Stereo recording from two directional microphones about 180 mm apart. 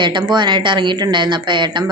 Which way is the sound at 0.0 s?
25° right (ahead or behind).